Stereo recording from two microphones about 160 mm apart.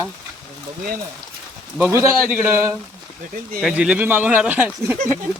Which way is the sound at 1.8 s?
15° right (ahead or behind).